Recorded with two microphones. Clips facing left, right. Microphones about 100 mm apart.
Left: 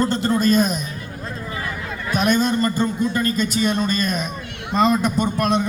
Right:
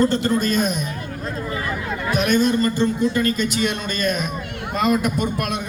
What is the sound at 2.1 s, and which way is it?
A man's voice, 35° left (ahead or behind).